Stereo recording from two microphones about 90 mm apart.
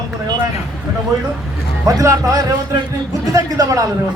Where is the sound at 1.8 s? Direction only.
40° right (ahead or behind).